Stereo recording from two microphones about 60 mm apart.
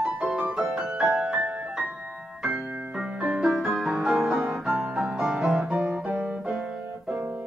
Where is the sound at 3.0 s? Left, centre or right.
Centre.